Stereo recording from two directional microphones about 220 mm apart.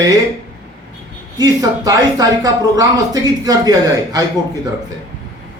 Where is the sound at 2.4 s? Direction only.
15° right (ahead or behind).